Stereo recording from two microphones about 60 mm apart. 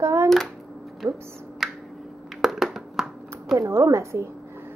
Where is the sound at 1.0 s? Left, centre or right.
Right.